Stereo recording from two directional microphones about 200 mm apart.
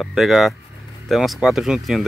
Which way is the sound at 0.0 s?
Centre (ahead or behind).